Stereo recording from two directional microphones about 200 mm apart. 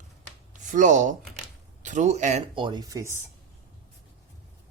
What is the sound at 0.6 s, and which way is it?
Speech, 40° right (ahead or behind).